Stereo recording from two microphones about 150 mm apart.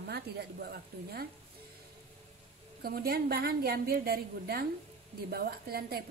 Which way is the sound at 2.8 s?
85° right.